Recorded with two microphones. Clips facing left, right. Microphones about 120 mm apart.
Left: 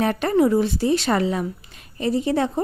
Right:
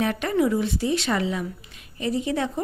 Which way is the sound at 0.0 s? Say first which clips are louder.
Left 4 dB; 40° left (ahead or behind).